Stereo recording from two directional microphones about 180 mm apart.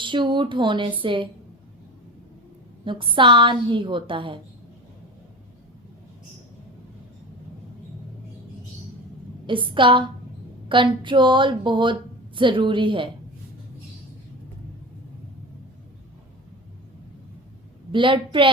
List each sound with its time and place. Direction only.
0.0 s a woman's voice: 25° right (ahead or behind)
2.8 s a woman's voice: 25° right (ahead or behind)
9.5 s a woman's voice: 30° right (ahead or behind)
17.9 s a woman's voice: 25° right (ahead or behind)